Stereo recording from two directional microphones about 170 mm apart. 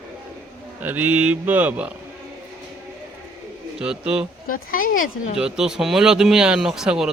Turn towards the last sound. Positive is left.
turn(degrees=-5)  # may be behind; listen again after turning